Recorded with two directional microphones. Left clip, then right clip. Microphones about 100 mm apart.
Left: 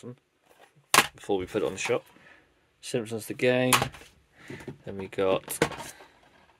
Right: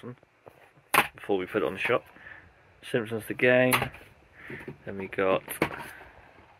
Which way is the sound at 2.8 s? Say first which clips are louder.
Right 2 dB; 50° left (ahead or behind).